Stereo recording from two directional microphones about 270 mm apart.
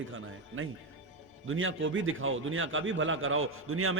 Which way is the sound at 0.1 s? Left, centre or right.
Right.